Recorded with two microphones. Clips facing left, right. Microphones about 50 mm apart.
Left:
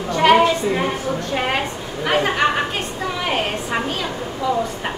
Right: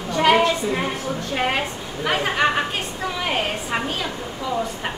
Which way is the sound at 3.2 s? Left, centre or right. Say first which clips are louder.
Left 2 dB; centre.